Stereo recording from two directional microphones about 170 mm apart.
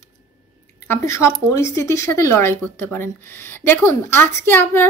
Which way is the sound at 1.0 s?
15° left (ahead or behind).